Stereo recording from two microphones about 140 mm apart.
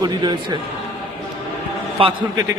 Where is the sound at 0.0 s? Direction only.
30° right (ahead or behind).